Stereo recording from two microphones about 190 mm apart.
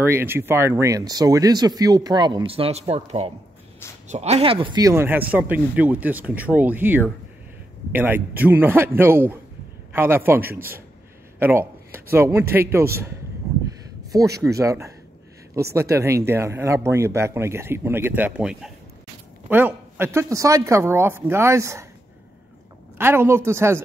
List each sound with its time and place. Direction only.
0.0 s speech: 10° right (ahead or behind)
14.4 s speech: 15° right (ahead or behind)
22.9 s speech: 10° right (ahead or behind)